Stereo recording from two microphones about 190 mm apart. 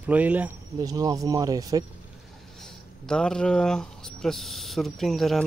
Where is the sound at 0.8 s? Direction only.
20° right (ahead or behind).